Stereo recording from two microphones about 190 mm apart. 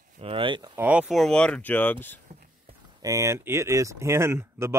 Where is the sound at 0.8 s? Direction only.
5° right (ahead or behind); by 2.2 s 10° left (ahead or behind).